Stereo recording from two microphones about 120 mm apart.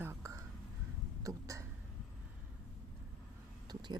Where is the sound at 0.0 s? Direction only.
20° right (ahead or behind).